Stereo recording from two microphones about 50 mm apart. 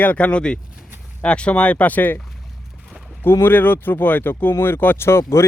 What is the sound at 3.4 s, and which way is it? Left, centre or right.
Speech, left.